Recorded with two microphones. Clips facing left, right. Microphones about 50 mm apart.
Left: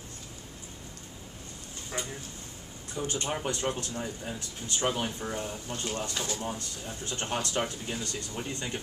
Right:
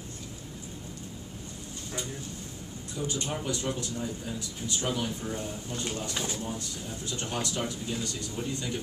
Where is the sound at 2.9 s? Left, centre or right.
Left.